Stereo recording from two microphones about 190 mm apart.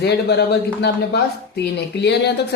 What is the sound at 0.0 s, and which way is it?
A woman's voice, 60° left (ahead or behind).